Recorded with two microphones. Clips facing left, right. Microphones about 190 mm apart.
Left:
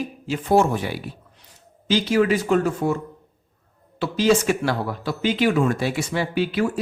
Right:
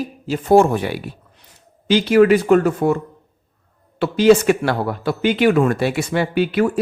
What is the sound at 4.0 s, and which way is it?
Speech, 60° right (ahead or behind).